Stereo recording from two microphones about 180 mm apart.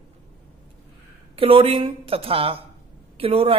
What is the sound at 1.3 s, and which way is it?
A man's voice, 30° right (ahead or behind).